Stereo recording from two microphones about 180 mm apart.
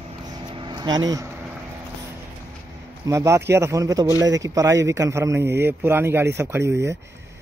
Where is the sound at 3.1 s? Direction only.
15° right (ahead or behind).